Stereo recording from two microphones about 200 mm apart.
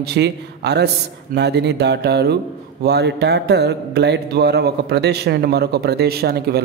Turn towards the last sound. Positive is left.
turn(degrees=-50)  # may be behind; listen again after turning